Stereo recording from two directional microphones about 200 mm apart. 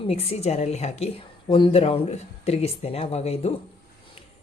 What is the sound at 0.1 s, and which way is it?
A woman's voice, 30° left (ahead or behind).